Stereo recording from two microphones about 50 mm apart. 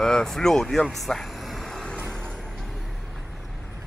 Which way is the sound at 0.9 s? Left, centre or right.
Centre.